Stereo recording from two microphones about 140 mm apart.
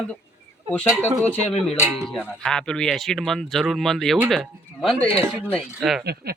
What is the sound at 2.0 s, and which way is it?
Speech, 5° left (ahead or behind).